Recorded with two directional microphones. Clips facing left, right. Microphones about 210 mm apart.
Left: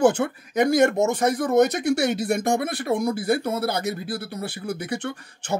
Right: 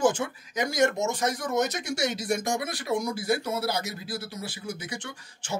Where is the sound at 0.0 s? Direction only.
60° left (ahead or behind).